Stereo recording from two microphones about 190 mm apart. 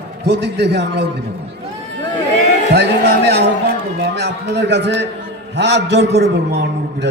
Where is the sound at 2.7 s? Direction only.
65° right (ahead or behind).